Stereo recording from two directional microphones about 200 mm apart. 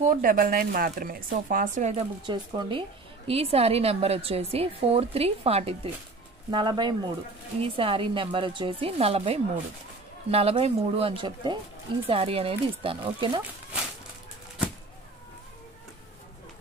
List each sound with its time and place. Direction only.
0.0 s speech: 45° right (ahead or behind)
2.2 s a woman's voice: 25° right (ahead or behind)